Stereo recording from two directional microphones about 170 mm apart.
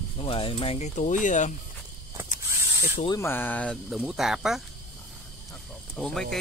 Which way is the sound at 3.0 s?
20° left (ahead or behind).